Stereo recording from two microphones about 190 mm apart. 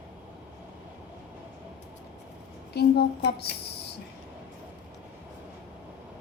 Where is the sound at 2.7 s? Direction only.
60° left (ahead or behind).